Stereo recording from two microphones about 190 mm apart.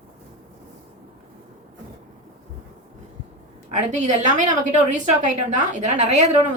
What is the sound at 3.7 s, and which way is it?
Speech, 40° right (ahead or behind).